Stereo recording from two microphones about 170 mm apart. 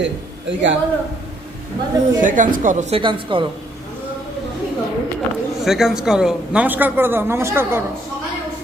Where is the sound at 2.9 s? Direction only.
30° right (ahead or behind).